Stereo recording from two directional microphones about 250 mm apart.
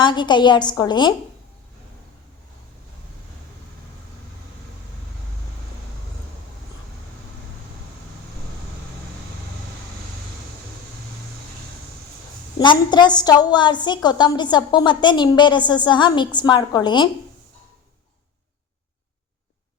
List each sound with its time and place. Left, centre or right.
0.0 s a woman's voice: centre
12.5 s a woman's voice: centre